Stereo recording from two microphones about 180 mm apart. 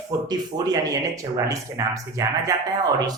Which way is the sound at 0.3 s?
20° right (ahead or behind).